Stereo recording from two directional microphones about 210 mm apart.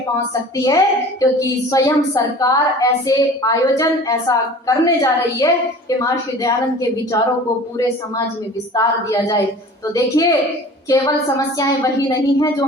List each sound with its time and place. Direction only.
0.5 s a woman's voice: 15° left (ahead or behind)
8.7 s a woman's voice: 15° left (ahead or behind)